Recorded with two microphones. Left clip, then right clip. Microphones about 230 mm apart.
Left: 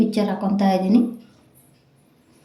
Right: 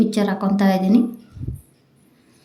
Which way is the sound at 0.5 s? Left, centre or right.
Right.